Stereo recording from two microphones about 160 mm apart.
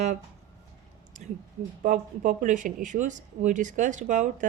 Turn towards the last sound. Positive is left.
turn(degrees=-50)  # may be behind; listen again after turning